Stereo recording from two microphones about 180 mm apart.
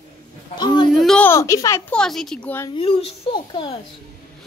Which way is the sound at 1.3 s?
15° left (ahead or behind).